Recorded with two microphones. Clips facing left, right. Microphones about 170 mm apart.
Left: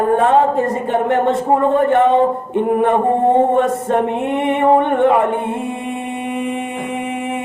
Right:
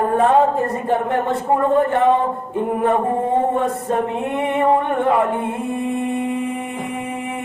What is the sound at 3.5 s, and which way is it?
Music, 85° left.